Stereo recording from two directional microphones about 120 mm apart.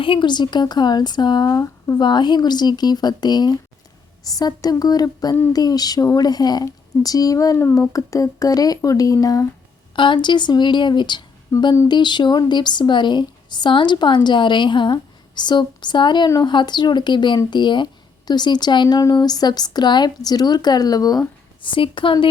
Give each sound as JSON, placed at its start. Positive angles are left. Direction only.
{"t": 0.0, "sound": "speech", "side_deg": 45}
{"t": 2.0, "sound": "speech", "side_deg": 40}
{"t": 9.9, "sound": "speech", "side_deg": 45}